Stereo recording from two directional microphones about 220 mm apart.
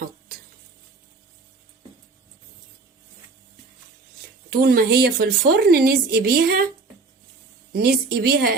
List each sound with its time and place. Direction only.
4.4 s a woman's voice: 45° right (ahead or behind)
7.7 s a woman's voice: 45° right (ahead or behind)